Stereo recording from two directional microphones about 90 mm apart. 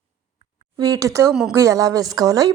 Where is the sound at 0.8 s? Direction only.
40° right (ahead or behind).